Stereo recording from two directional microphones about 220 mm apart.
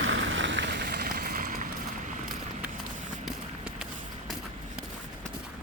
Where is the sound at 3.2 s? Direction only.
Centre (ahead or behind).